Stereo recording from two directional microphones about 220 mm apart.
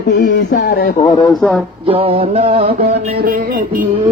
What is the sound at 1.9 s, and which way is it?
Music, 25° right (ahead or behind).